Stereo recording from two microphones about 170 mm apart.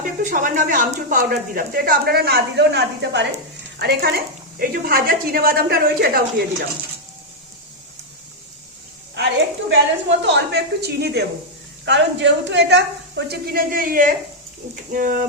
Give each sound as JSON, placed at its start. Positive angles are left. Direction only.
{"t": 0.0, "sound": "speech", "side_deg": -50}
{"t": 1.3, "sound": "a woman's voice", "side_deg": -65}
{"t": 3.8, "sound": "a woman's voice", "side_deg": -70}
{"t": 9.1, "sound": "a sound", "side_deg": -90}
{"t": 10.2, "sound": "a woman's voice", "side_deg": -80}
{"t": 11.9, "sound": "a woman's voice", "side_deg": -90}